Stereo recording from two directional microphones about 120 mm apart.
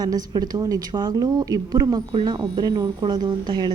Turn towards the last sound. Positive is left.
turn(degrees=-35)  # may be behind; listen again after turning